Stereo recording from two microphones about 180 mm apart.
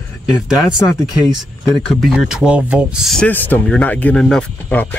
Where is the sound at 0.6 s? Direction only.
20° left (ahead or behind).